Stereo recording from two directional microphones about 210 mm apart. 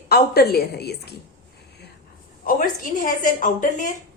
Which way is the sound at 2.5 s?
40° left (ahead or behind).